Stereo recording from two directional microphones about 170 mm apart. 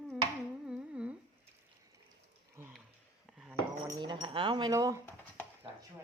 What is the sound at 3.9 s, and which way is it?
Speech, 25° right (ahead or behind).